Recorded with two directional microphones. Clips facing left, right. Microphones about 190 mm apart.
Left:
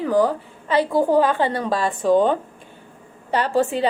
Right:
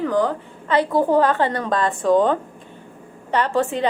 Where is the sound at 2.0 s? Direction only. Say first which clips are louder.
Even; 25° left (ahead or behind).